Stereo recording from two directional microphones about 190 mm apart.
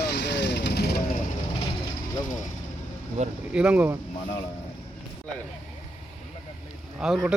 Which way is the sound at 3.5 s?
5° right (ahead or behind).